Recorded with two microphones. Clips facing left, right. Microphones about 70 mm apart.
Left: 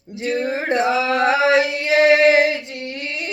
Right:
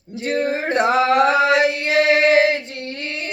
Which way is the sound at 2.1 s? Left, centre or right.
Right.